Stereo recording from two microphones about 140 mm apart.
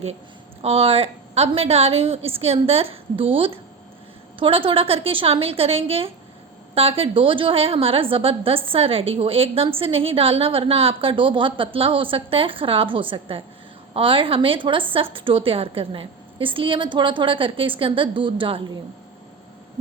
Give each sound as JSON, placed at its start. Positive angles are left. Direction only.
{"t": 0.6, "sound": "a woman's voice", "side_deg": -45}